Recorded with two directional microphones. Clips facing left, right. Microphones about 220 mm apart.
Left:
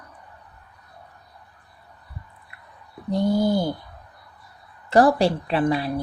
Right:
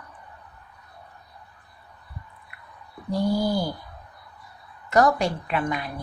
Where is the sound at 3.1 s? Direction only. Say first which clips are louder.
Left 3 dB; 20° left (ahead or behind).